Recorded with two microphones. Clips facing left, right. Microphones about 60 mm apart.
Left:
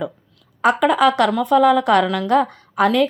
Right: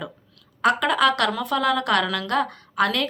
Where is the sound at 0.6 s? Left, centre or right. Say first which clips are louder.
Left 4 dB; centre.